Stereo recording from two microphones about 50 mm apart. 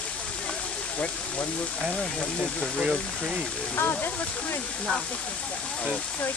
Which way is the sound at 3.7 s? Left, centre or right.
Left.